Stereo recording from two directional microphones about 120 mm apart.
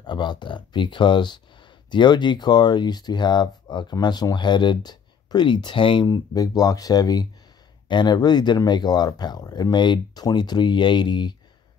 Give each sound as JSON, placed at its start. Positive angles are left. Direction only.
{"t": 0.0, "sound": "speech", "side_deg": 40}